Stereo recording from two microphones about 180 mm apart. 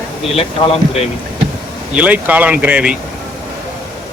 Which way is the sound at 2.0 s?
10° right (ahead or behind).